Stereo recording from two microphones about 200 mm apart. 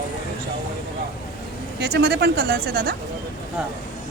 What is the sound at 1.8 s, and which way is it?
Speech, 55° right (ahead or behind).